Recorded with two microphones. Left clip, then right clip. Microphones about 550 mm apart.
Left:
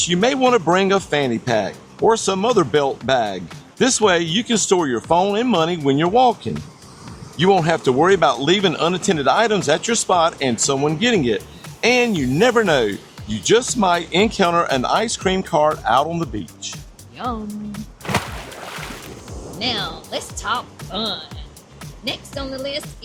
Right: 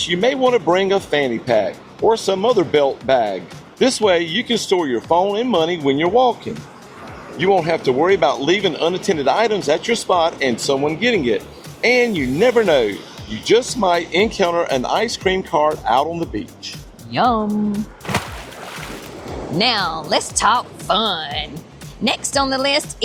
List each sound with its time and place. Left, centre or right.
0.0 s speech: left
7.3 s speech: left
17.2 s speech: centre
18.0 s a sound: centre
19.5 s speech: right